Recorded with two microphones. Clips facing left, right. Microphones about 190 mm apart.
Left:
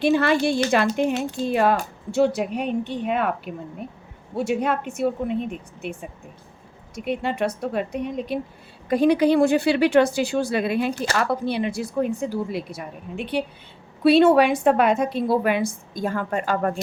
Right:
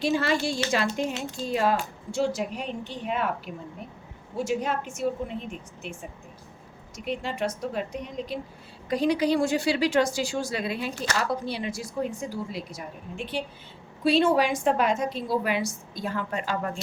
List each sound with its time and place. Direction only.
0.0 s a woman's voice: 60° left (ahead or behind)